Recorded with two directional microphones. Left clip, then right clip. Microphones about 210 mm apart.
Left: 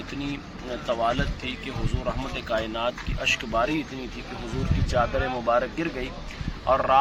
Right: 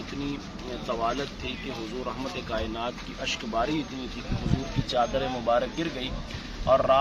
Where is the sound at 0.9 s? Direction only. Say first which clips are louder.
Left 4 dB; 40° left (ahead or behind).